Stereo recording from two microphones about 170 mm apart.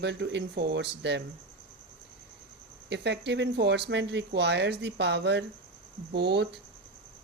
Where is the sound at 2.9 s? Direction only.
90° right.